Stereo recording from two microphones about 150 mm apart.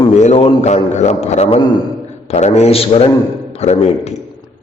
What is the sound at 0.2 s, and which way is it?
A man's voice, 50° left (ahead or behind).